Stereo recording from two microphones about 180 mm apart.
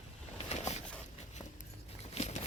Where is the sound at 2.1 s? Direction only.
35° left (ahead or behind).